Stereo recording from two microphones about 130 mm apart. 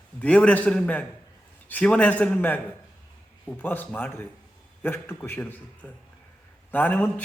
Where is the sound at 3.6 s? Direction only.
15° left (ahead or behind).